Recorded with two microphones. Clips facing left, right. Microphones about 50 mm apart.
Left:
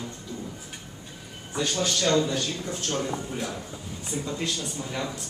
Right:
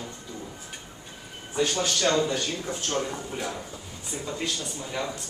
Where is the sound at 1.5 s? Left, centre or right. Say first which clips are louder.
Right 2 dB; centre.